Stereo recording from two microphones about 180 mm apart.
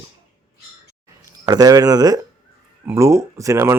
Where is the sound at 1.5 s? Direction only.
20° right (ahead or behind).